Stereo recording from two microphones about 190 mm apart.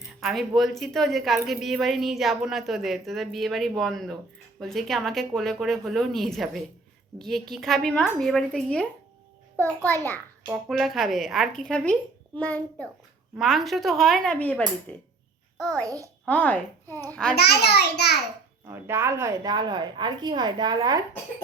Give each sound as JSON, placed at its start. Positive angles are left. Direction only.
{"t": 0.2, "sound": "a woman's voice", "side_deg": 0}
{"t": 10.5, "sound": "a woman's voice", "side_deg": 0}
{"t": 15.8, "sound": "a child's voice", "side_deg": -15}
{"t": 16.2, "sound": "a child's voice", "side_deg": 10}
{"t": 17.4, "sound": "a child's voice", "side_deg": 60}
{"t": 18.7, "sound": "a woman's voice", "side_deg": -15}